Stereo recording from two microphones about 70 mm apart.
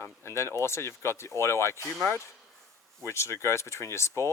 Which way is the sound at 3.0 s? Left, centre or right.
Left.